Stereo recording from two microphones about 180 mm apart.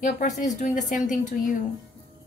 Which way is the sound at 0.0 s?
45° left (ahead or behind).